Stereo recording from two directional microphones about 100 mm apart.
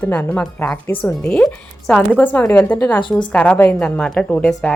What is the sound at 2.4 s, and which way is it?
Speech, 25° left (ahead or behind).